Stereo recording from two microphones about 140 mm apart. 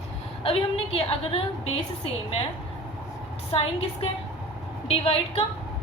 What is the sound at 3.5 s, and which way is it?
A woman's voice, 45° left (ahead or behind).